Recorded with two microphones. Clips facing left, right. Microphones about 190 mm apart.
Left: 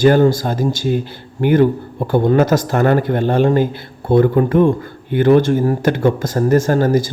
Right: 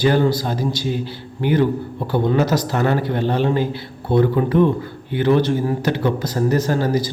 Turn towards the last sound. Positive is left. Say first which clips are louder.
# left 4 dB
turn(degrees=50)  # may be behind; listen again after turning